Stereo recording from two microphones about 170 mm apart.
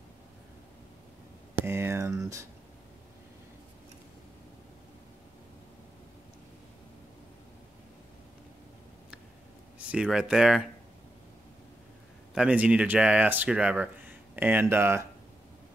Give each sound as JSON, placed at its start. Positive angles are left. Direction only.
{"t": 1.5, "sound": "a sound", "side_deg": -15}
{"t": 9.8, "sound": "speech", "side_deg": -5}
{"t": 12.4, "sound": "speech", "side_deg": -5}